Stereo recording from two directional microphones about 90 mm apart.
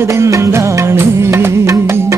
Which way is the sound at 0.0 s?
30° right (ahead or behind).